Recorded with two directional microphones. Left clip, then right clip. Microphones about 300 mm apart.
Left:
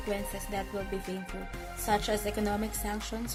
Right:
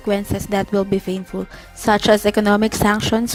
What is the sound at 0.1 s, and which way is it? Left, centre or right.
Speech, right.